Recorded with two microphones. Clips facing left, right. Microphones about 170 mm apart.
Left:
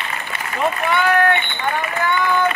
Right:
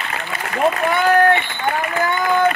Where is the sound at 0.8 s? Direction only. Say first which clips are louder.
Right 2 dB; 40° right (ahead or behind).